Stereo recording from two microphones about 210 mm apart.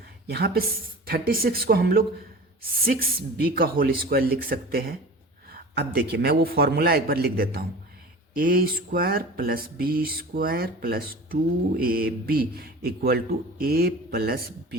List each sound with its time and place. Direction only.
0.3 s speech: 45° right (ahead or behind)